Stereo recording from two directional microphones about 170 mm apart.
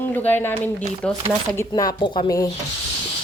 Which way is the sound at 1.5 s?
20° left (ahead or behind).